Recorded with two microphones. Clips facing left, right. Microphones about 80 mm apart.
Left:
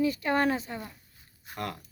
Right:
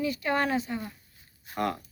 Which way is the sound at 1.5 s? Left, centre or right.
Centre.